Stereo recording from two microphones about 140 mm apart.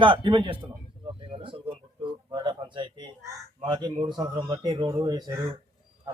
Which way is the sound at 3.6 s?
35° right (ahead or behind).